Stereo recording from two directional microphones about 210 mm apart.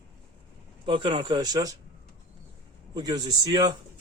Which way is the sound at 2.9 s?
20° right (ahead or behind).